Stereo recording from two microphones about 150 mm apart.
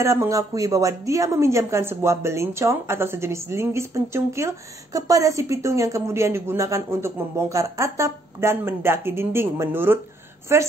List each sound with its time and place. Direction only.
0.0 s a woman's voice: 20° right (ahead or behind)